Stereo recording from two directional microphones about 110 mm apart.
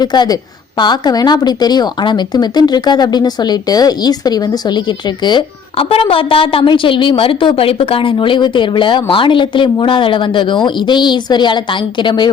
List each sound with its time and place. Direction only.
0.0 s a woman's voice: 40° left (ahead or behind)